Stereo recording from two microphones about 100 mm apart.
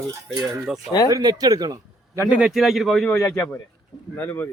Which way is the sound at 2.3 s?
5° right (ahead or behind).